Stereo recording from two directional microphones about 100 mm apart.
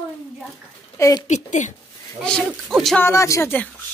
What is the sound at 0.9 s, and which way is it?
Speech, 35° left (ahead or behind).